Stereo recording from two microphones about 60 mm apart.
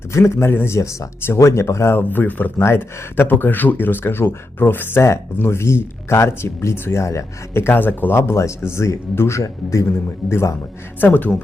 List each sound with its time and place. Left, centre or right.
0.1 s speech: left
0.8 s speech: left
1.2 s speech: left
2.0 s speech: left
2.6 s speech: left
5.0 s speech: left
8.1 s speech: left
11.0 s speech: left